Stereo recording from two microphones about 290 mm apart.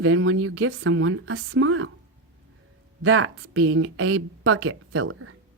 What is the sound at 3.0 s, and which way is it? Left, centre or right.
Speech, right.